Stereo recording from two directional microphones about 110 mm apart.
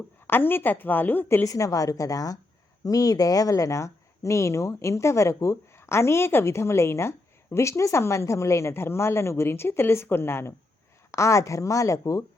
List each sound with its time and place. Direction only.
0.3 s a woman's voice: 20° left (ahead or behind)
1.5 s a woman's voice: 30° left (ahead or behind)